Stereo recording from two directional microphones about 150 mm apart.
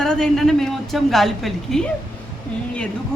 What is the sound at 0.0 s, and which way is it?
A woman's voice, 5° left (ahead or behind).